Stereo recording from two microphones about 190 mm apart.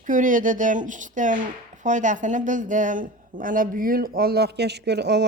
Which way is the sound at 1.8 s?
40° right (ahead or behind).